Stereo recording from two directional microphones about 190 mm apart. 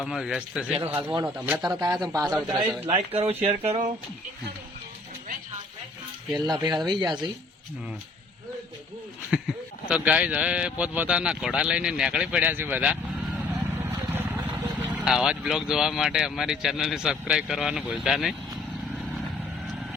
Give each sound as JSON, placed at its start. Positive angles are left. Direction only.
{"t": 0.0, "sound": "speech", "side_deg": 0}
{"t": 1.7, "sound": "speech", "side_deg": -20}
{"t": 2.9, "sound": "speech", "side_deg": -30}
{"t": 6.3, "sound": "speech", "side_deg": -20}
{"t": 9.9, "sound": "speech", "side_deg": -5}
{"t": 14.0, "sound": "speech", "side_deg": -10}